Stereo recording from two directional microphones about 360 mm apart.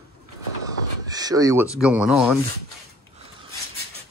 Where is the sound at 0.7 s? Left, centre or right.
Centre.